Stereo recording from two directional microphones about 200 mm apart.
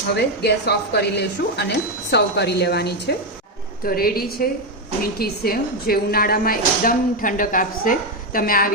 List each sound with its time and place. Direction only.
0.4 s speech: 55° left (ahead or behind)